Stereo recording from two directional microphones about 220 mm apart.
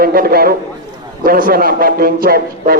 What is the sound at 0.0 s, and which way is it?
A man's voice, 40° right (ahead or behind).